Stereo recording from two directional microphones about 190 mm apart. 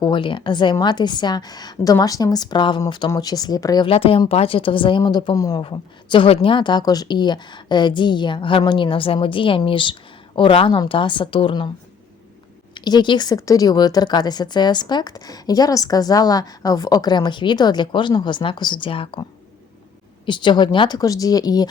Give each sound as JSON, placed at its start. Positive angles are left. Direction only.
{"t": 0.0, "sound": "speech", "side_deg": 25}
{"t": 12.7, "sound": "speech", "side_deg": 25}
{"t": 20.2, "sound": "speech", "side_deg": 25}